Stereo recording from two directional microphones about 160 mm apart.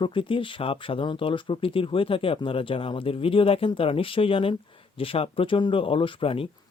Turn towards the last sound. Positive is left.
turn(degrees=35)  # may be behind; listen again after turning